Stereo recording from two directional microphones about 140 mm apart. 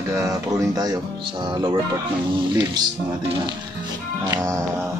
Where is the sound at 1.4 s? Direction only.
35° right (ahead or behind).